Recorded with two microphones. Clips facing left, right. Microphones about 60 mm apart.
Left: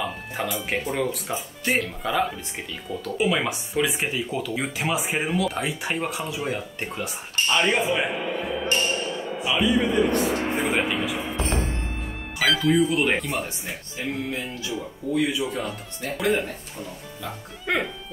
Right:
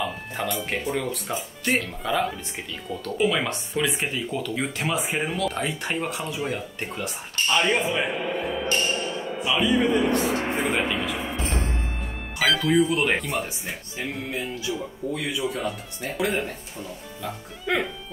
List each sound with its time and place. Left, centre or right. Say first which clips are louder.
0.4 s speech: left 1 dB; centre
9.4 s a man's voice: even; centre
15.0 s speech: left 3 dB; right
15.5 s speech: right 1 dB; centre